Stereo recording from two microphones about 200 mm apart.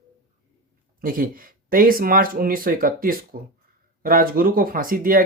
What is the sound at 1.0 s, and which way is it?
Speech, 45° right (ahead or behind).